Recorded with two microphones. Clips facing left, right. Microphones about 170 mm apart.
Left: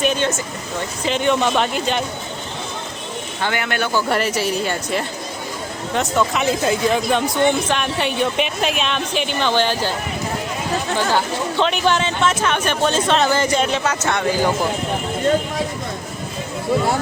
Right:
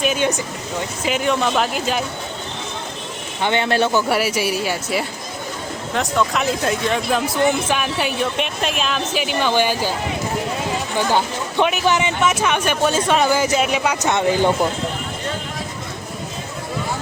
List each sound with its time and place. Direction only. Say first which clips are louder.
0.0 s a woman's voice: even; 10° right (ahead or behind)
3.4 s speech: right 5 dB; 25° right (ahead or behind)
4.1 s a woman's voice: even; 10° right (ahead or behind)
10.9 s speech: right 1 dB; 15° right (ahead or behind)